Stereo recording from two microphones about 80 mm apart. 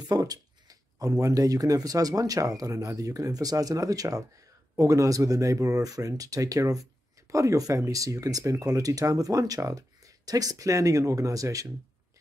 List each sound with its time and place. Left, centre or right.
0.1 s speech: right